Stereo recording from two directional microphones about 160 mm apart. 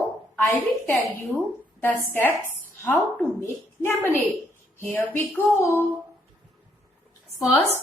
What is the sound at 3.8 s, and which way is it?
Speech, 15° left (ahead or behind).